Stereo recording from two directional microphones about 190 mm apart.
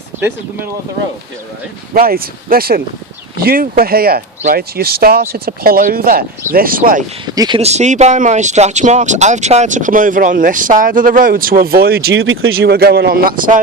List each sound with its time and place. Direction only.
0.2 s speech: 10° right (ahead or behind)
1.9 s speech: 50° right (ahead or behind)
7.3 s speech: 20° right (ahead or behind)
7.6 s speech: 35° right (ahead or behind); by 12.1 s 55° right (ahead or behind)
12.1 s speech: 90° right
12.5 s speech: 55° right (ahead or behind)